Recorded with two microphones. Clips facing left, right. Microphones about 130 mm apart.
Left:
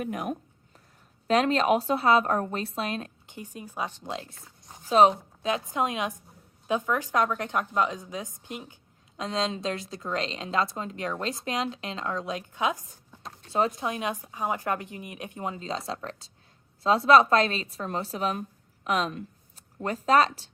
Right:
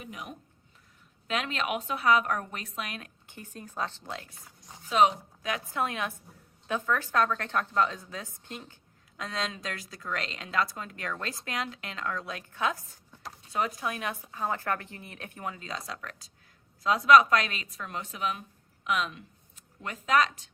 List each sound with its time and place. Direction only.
0.0 s speech: 50° left (ahead or behind)
1.3 s a woman's voice: 35° left (ahead or behind)
3.2 s a woman's voice: 15° left (ahead or behind)
4.9 s a woman's voice: 35° left (ahead or behind)